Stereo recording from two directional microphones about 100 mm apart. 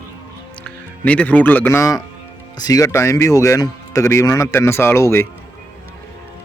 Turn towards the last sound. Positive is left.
turn(degrees=25)  # may be behind; listen again after turning